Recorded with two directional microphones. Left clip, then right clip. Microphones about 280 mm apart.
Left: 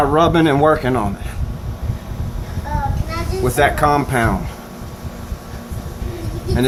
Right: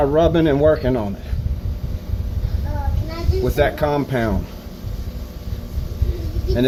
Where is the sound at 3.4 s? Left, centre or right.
Left.